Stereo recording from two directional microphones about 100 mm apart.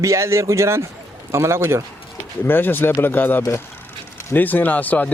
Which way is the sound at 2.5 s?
20° left (ahead or behind).